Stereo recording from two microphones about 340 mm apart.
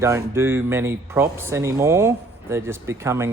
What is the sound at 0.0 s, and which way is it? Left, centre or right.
Speech, centre.